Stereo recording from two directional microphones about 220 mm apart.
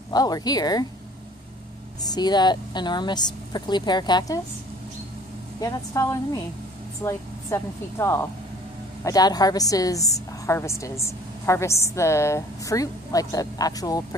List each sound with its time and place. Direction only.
0.1 s a woman's voice: 15° left (ahead or behind)
2.0 s a woman's voice: 20° left (ahead or behind)
5.6 s a woman's voice: 15° left (ahead or behind)